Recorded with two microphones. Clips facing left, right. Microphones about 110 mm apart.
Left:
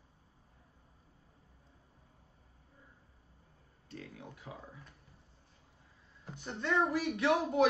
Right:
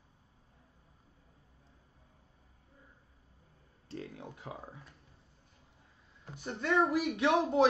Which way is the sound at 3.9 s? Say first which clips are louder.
Right 4 dB; 30° right (ahead or behind).